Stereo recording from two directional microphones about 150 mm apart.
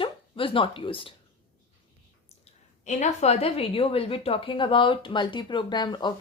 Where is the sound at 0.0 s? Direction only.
35° left (ahead or behind).